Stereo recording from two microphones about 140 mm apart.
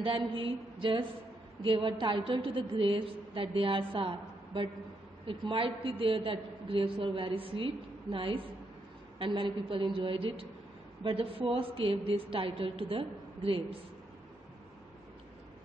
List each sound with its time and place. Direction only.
0.3 s a woman's voice: 40° right (ahead or behind)
5.2 s a woman's voice: 35° right (ahead or behind)